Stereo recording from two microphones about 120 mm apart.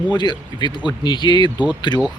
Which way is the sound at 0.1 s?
40° left (ahead or behind).